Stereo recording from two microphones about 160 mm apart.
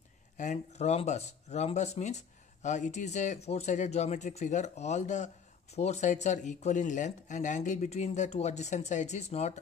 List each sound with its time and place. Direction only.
0.4 s speech: 45° left (ahead or behind)